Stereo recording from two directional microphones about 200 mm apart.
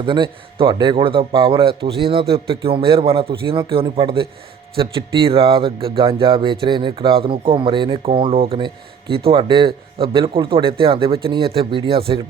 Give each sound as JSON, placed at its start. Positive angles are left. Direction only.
{"t": 0.0, "sound": "speech", "side_deg": -25}